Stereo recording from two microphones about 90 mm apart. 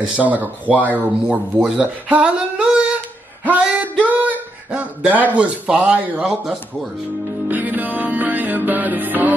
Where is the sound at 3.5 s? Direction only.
15° right (ahead or behind).